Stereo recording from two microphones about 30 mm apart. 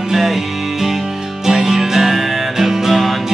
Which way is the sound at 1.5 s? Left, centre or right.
Centre.